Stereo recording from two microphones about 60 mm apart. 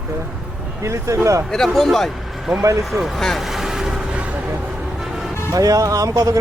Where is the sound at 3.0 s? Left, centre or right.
Centre.